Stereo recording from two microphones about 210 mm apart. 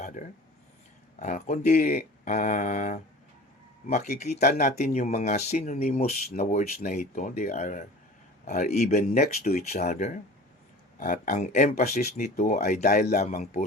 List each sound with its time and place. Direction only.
0.0 s a sound: 40° left (ahead or behind)
1.2 s speech: 35° left (ahead or behind)
9.2 s speech: 45° left (ahead or behind)
9.8 s speech: 35° left (ahead or behind)
11.7 s speech: 45° left (ahead or behind)